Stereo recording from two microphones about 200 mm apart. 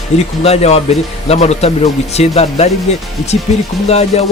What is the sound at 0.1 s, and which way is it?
Speech, 35° left (ahead or behind).